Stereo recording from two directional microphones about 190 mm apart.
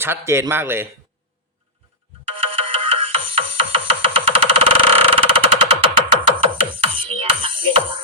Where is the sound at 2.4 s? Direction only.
30° right (ahead or behind).